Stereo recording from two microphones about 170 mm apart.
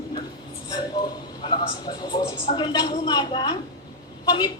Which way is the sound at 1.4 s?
25° left (ahead or behind).